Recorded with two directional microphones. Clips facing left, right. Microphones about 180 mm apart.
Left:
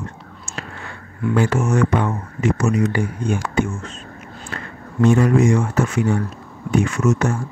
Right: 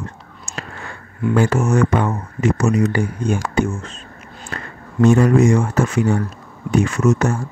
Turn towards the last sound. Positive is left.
turn(degrees=-35)  # may be behind; listen again after turning